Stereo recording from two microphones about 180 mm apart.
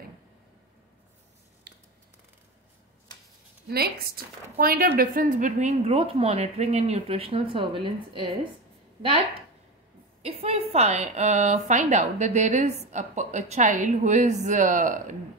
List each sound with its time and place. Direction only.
1.7 s a sound: 60° right (ahead or behind)
3.6 s a woman's voice: 60° right (ahead or behind); by 8.3 s 30° right (ahead or behind)
10.2 s a woman's voice: 35° right (ahead or behind)